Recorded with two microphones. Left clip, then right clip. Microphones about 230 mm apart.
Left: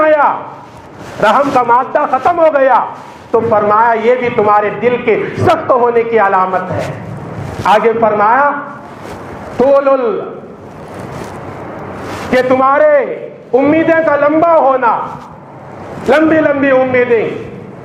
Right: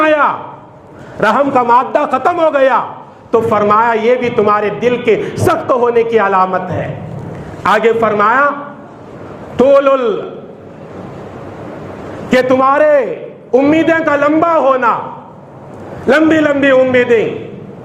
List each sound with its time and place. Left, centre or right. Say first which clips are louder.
0.0 s a sound: left 2 dB; right
1.2 s a man's voice: left 1 dB; right
7.6 s a man's voice: left 1 dB; right
9.6 s a man's voice: right 1 dB; right
12.3 s a man's voice: even; right
16.0 s a man's voice: left 1 dB; right